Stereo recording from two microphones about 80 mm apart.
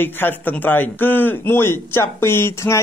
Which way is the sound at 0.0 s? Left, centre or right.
Left.